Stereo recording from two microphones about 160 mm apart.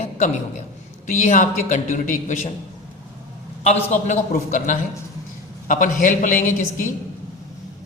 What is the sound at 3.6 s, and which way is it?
A man's voice, 40° left (ahead or behind).